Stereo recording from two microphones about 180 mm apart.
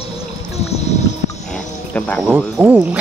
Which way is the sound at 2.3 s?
10° right (ahead or behind).